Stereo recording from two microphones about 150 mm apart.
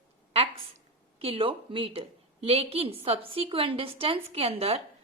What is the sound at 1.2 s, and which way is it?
A woman's voice, 40° right (ahead or behind).